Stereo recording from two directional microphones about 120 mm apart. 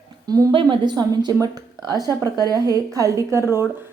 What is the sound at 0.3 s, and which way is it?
Speech, 30° right (ahead or behind).